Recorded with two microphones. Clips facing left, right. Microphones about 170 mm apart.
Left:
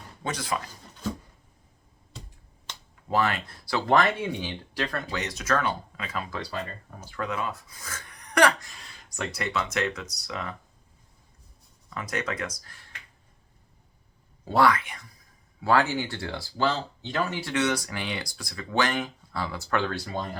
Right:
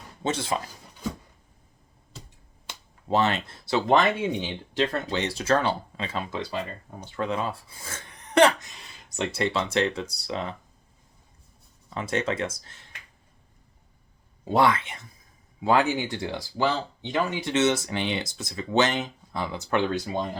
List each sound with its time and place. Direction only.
0.2 s speech: 25° right (ahead or behind)
3.1 s speech: 25° right (ahead or behind)
11.9 s speech: 25° right (ahead or behind)
14.4 s speech: 20° right (ahead or behind)